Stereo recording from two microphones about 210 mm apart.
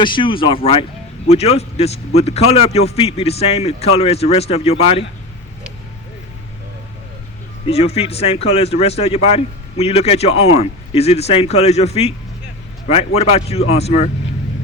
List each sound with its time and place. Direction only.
0.0 s a man's voice: 25° left (ahead or behind)
7.7 s a man's voice: 30° left (ahead or behind)